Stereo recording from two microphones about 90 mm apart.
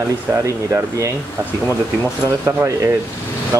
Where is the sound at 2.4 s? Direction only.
35° right (ahead or behind).